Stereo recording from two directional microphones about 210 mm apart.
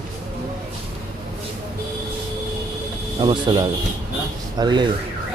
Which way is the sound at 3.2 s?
20° right (ahead or behind).